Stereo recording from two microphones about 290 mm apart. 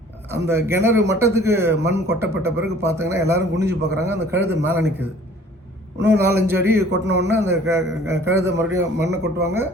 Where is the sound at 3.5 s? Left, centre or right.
Right.